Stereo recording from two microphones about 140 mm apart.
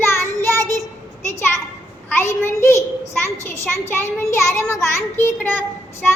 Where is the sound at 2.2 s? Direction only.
20° left (ahead or behind).